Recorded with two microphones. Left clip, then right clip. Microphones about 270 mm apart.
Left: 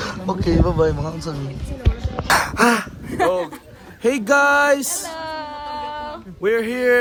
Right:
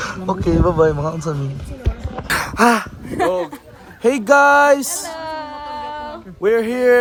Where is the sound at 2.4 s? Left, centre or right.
Centre.